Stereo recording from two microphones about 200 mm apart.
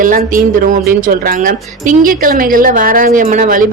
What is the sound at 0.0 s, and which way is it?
A woman's voice, 45° right (ahead or behind).